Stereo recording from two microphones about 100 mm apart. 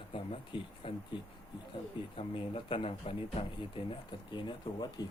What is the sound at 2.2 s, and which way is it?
Speech, 65° left (ahead or behind).